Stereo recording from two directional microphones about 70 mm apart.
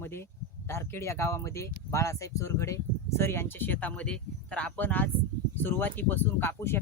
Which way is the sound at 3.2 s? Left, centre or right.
Left.